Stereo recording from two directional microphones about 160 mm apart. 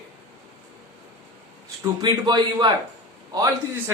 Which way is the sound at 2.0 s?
25° right (ahead or behind).